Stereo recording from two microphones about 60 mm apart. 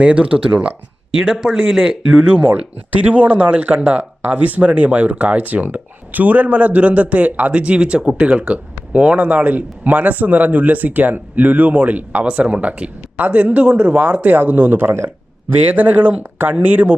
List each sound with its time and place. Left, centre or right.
0.0 s speech: centre